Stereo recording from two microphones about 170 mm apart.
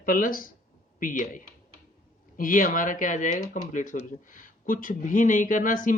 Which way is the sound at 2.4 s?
55° left (ahead or behind).